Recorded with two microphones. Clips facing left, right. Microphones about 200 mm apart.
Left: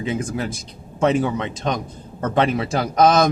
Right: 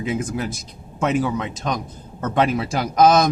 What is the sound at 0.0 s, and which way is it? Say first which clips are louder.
Speech: even; 5° right (ahead or behind).